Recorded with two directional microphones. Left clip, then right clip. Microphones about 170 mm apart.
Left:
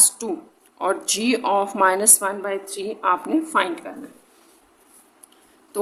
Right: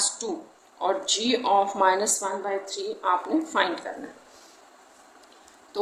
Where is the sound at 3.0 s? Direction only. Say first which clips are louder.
Left 4 dB; 40° left (ahead or behind).